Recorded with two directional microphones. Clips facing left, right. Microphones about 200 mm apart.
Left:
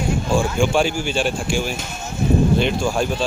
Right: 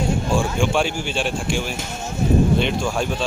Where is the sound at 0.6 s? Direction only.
5° left (ahead or behind).